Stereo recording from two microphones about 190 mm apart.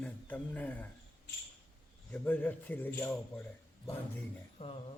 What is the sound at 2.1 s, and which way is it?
Speech, 10° left (ahead or behind).